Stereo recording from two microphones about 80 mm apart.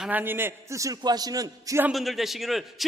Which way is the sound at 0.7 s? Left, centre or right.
Right.